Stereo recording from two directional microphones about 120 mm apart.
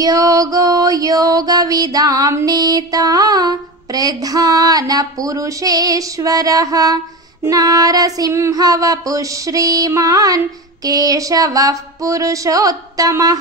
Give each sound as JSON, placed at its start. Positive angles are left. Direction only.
{"t": 0.0, "sound": "music", "side_deg": -30}
{"t": 7.4, "sound": "child singing", "side_deg": -30}